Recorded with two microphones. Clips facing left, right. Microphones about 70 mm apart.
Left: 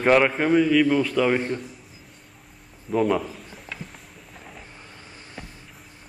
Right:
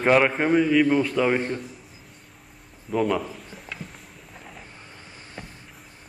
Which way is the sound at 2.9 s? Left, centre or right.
Centre.